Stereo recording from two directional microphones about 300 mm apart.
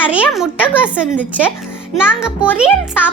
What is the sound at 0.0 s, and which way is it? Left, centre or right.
A child's voice, centre.